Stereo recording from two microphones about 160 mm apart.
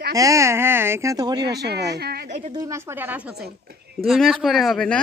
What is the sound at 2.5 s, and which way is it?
Speech, 20° right (ahead or behind).